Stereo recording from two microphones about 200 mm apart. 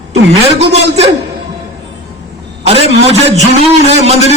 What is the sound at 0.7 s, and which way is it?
Speech, 30° right (ahead or behind).